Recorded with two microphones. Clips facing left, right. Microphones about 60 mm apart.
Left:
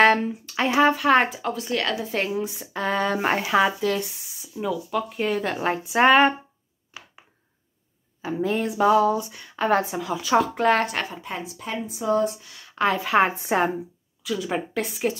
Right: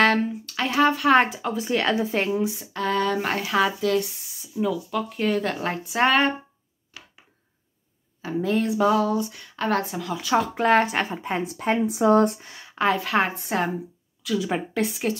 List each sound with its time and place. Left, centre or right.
0.0 s speech: centre
2.0 s speech: centre
2.7 s speech: centre
6.9 s a sound: centre
8.2 s speech: centre
10.1 s speech: centre
11.1 s a woman's voice: right
11.4 s speech: right
11.8 s speech: right
12.4 s speech: right
12.6 s speech: centre
14.4 s speech: centre